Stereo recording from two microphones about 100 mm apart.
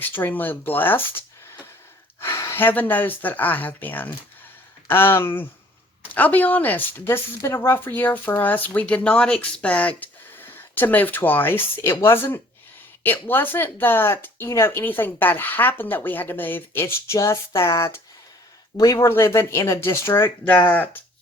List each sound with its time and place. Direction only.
0.0 s speech: 20° left (ahead or behind)
2.2 s speech: 25° left (ahead or behind)
19.0 s speech: 25° left (ahead or behind)